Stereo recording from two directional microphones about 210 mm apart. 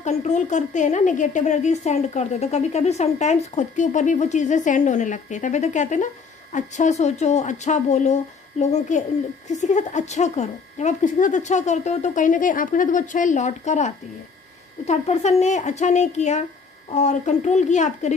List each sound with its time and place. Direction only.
0.0 s a woman's voice: 35° left (ahead or behind)